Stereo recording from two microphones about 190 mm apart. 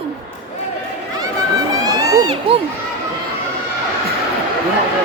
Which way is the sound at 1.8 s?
20° right (ahead or behind).